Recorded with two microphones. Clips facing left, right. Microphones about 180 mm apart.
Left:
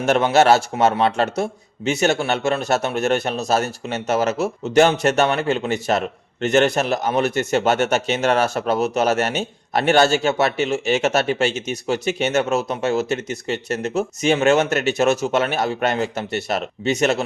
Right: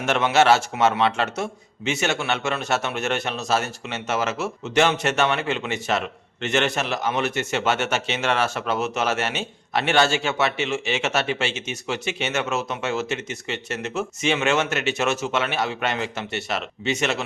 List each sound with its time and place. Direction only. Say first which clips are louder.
0.0 s a man's voice: left 4 dB; 40° left (ahead or behind)